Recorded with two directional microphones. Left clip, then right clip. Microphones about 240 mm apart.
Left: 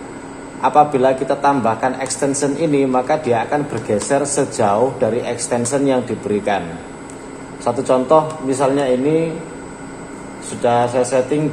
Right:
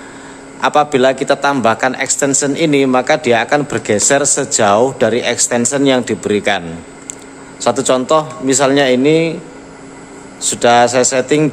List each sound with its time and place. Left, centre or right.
0.6 s a man's voice: right
7.6 s a man's voice: right
10.6 s speech: right